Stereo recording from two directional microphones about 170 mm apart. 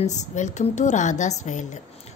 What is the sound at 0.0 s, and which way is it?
A woman's voice, 45° left (ahead or behind).